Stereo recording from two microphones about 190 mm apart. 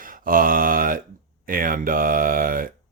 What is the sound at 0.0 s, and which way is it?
Mantra, 45° right (ahead or behind).